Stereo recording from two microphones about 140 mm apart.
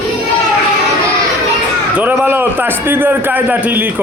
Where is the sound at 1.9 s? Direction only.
15° right (ahead or behind).